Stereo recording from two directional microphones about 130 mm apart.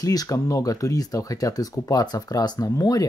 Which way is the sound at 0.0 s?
30° left (ahead or behind).